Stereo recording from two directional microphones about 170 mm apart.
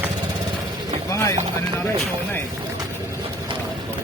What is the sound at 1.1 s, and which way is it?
Vehicle, 20° left (ahead or behind).